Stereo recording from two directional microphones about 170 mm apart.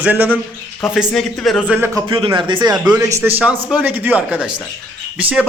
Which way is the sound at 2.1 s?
25° right (ahead or behind).